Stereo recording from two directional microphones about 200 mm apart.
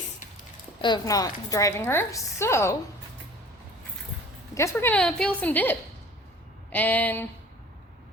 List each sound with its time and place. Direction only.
0.8 s a woman's voice: 20° left (ahead or behind)
4.5 s a woman's voice: 10° left (ahead or behind)